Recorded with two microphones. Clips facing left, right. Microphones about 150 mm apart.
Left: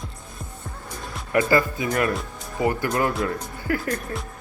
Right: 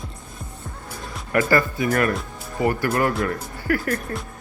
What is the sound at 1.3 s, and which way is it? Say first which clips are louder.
Speech: even; 20° left (ahead or behind).